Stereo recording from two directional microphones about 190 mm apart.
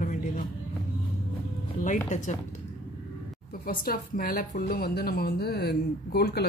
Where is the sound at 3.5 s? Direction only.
50° left (ahead or behind).